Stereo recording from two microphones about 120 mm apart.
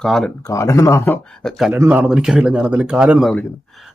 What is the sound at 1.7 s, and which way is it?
Speech, 15° right (ahead or behind).